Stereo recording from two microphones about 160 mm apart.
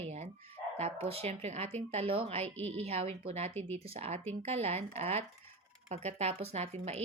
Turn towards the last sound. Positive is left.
turn(degrees=-40)  # may be behind; listen again after turning